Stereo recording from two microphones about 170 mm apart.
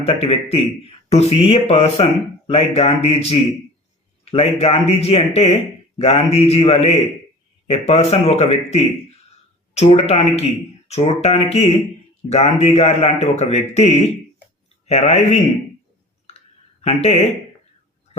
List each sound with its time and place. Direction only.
0.0 s speech: 35° left (ahead or behind)
10.1 s speech: 40° left (ahead or behind)
16.8 s speech: 40° left (ahead or behind)